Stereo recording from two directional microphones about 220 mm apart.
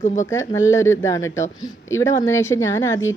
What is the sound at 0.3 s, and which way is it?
A woman's voice, 10° left (ahead or behind).